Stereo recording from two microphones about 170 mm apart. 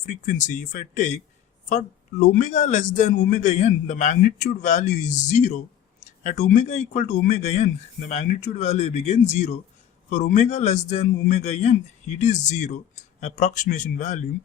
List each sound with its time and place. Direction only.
0.0 s speech: 50° left (ahead or behind)